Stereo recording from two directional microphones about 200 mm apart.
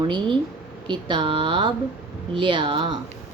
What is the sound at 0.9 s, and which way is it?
Speech, 25° right (ahead or behind).